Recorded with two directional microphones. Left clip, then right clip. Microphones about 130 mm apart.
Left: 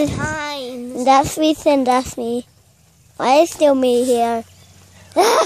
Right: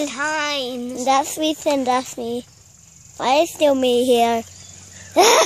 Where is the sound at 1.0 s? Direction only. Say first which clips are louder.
Left 5 dB; 35° left (ahead or behind).